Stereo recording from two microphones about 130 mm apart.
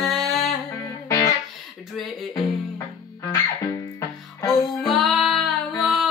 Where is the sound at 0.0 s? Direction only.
Centre (ahead or behind).